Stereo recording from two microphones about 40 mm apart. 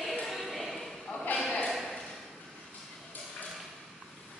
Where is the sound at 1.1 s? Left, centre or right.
Left.